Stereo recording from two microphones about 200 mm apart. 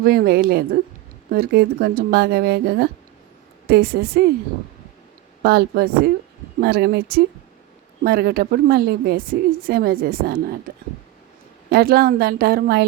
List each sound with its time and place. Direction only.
0.0 s a woman's voice: 50° right (ahead or behind)
5.4 s a woman's voice: 50° right (ahead or behind)
11.7 s a woman's voice: 50° right (ahead or behind)